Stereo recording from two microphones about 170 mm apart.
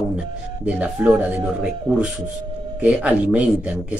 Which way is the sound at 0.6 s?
5° right (ahead or behind).